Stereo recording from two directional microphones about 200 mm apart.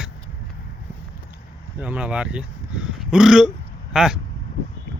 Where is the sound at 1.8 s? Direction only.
5° right (ahead or behind).